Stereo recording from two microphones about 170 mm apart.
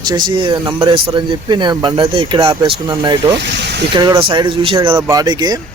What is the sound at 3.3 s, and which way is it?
Speech, 90° right.